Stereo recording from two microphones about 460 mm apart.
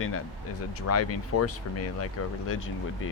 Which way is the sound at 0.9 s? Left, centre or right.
Left.